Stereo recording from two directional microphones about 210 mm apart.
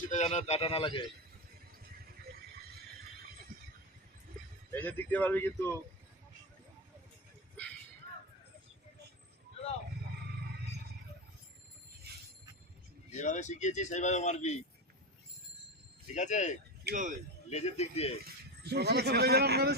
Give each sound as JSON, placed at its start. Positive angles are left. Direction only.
{"t": 0.1, "sound": "speech", "side_deg": 35}
{"t": 4.7, "sound": "speech", "side_deg": 10}
{"t": 13.1, "sound": "speech", "side_deg": 35}
{"t": 16.1, "sound": "speech", "side_deg": 35}
{"t": 16.8, "sound": "speech", "side_deg": -40}
{"t": 17.5, "sound": "speech", "side_deg": 30}
{"t": 18.3, "sound": "speech", "side_deg": -50}